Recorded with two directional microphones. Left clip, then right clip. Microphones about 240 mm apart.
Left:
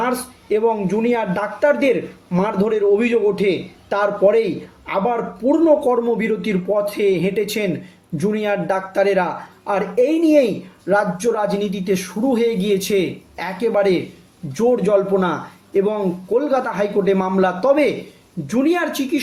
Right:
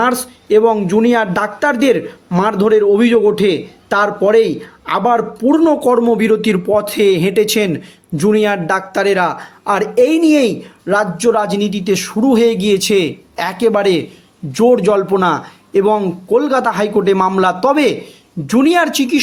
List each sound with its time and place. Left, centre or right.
0.0 s speech: right